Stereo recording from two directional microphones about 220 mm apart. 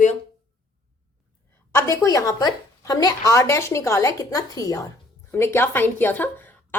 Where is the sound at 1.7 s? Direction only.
15° left (ahead or behind).